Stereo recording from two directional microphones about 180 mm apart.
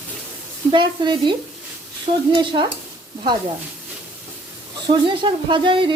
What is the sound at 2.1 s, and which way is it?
Speech, 40° right (ahead or behind).